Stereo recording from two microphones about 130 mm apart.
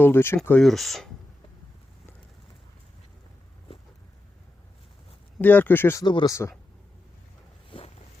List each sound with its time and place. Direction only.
0.0 s speech: 15° left (ahead or behind)
0.6 s speech: centre (ahead or behind)
5.4 s speech: 15° left (ahead or behind)
6.1 s speech: 35° left (ahead or behind)
7.7 s boat: 40° left (ahead or behind)